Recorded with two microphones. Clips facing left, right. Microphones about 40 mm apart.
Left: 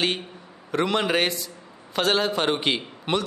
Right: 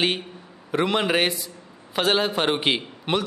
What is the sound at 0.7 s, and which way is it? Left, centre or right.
A man's voice, centre.